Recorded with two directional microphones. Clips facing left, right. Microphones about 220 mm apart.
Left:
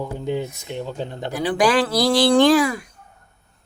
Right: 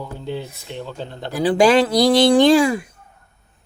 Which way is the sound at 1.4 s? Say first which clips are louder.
Right 4 dB; 25° right (ahead or behind).